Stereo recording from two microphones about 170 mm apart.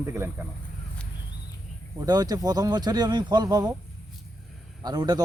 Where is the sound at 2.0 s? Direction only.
25° right (ahead or behind).